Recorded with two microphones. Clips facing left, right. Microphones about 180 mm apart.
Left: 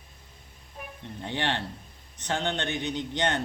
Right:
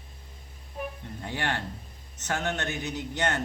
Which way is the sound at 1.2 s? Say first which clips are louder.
Left 2 dB; 25° left (ahead or behind).